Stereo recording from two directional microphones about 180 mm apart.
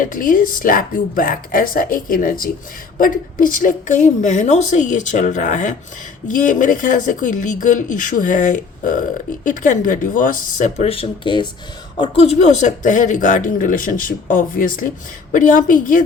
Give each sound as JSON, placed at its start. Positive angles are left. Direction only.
{"t": 0.0, "sound": "speech", "side_deg": 50}